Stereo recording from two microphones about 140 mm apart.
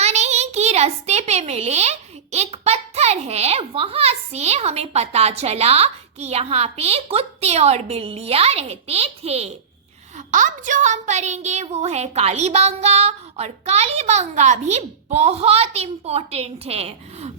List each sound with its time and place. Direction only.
0.0 s a child's voice: 50° right (ahead or behind)
10.2 s a woman's voice: 65° right (ahead or behind); by 17.3 s 50° right (ahead or behind)